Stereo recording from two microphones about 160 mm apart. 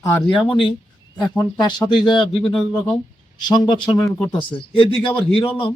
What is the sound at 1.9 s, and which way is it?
A man's voice, 30° left (ahead or behind).